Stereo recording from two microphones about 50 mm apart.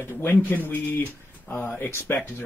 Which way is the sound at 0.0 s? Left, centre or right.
Left.